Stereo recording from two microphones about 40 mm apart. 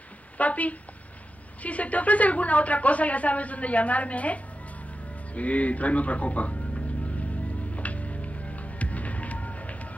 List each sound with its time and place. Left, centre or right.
0.4 s a woman's voice: left
7.7 s music: left